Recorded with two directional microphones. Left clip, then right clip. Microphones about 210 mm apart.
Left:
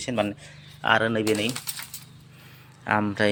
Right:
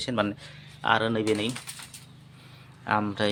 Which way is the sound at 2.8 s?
15° left (ahead or behind).